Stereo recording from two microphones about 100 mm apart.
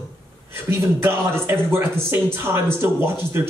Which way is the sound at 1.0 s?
25° right (ahead or behind).